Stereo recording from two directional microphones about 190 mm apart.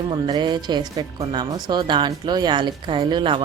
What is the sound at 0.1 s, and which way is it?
Speech, 25° right (ahead or behind).